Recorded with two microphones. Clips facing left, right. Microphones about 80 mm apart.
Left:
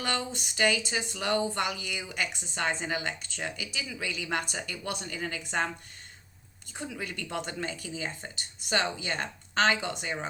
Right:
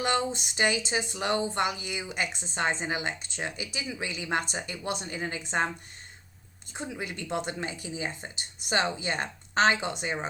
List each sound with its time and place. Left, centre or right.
0.0 s speech: right
6.7 s speech: centre